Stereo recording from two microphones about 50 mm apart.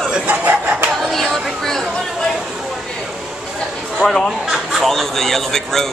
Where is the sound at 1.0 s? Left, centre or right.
Centre.